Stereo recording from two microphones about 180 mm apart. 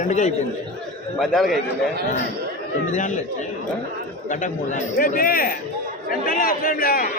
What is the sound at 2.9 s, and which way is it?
Speech, 45° left (ahead or behind).